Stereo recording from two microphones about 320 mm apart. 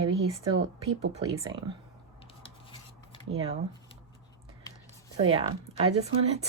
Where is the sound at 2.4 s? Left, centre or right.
Centre.